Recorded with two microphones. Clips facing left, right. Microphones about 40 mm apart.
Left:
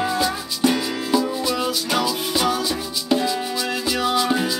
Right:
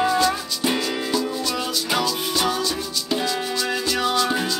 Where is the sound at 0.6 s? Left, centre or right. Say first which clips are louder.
Left 4 dB; centre.